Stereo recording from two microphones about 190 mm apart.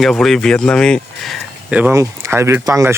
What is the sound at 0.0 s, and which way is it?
Speech, centre (ahead or behind).